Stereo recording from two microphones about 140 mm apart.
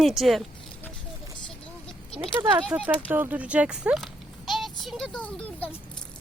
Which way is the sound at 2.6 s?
10° right (ahead or behind).